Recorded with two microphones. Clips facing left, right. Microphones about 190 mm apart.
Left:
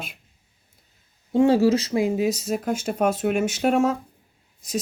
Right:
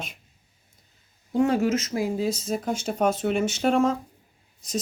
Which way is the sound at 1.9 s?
20° left (ahead or behind).